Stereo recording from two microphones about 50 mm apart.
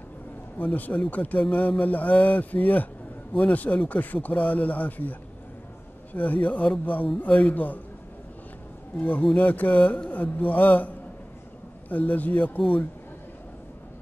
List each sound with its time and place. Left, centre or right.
0.6 s speech: left
6.1 s speech: left
9.0 s speech: left
11.9 s speech: left